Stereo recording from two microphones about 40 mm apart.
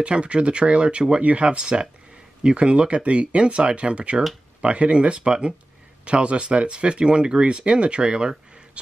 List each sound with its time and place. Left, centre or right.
0.0 s speech: right